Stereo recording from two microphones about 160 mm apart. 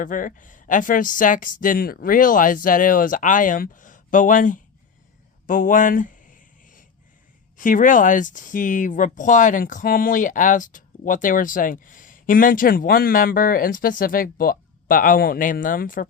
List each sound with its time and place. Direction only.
0.0 s speech: 55° left (ahead or behind)
5.5 s a sound: 55° left (ahead or behind)
7.5 s speech: 55° left (ahead or behind)